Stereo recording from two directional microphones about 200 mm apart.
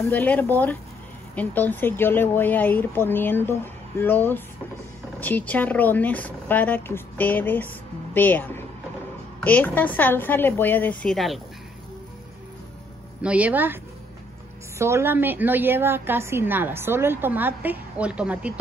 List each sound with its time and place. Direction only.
0.0 s speech: 10° left (ahead or behind)
13.2 s a woman's voice: 5° right (ahead or behind)
14.8 s a woman's voice: 15° right (ahead or behind)